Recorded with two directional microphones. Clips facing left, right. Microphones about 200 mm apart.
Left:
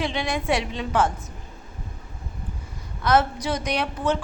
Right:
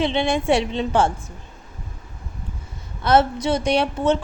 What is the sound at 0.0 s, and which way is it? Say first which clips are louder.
Speech: right 6 dB; 25° right (ahead or behind).